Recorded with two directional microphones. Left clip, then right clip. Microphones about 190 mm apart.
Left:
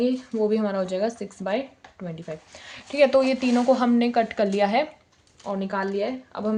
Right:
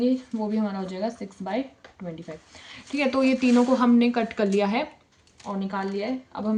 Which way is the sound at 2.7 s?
30° left (ahead or behind).